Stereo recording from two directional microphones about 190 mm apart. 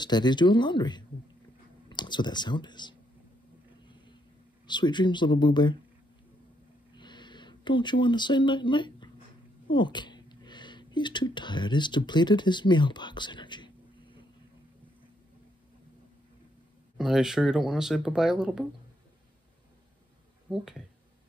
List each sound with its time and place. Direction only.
0.0 s speech: 25° left (ahead or behind)
3.8 s vehicle: 25° left (ahead or behind)
4.6 s speech: 25° left (ahead or behind)
7.0 s a sound: 25° left (ahead or behind)
9.7 s speech: 25° left (ahead or behind)
16.9 s speech: centre (ahead or behind)
20.5 s speech: 5° right (ahead or behind)